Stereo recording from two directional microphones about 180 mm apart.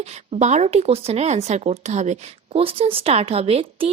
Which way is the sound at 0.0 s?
40° right (ahead or behind).